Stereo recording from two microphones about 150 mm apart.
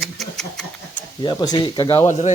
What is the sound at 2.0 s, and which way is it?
Speech, 50° left (ahead or behind).